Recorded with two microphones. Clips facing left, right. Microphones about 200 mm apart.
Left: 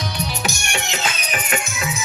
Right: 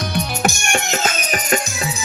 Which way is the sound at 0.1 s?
50° right (ahead or behind).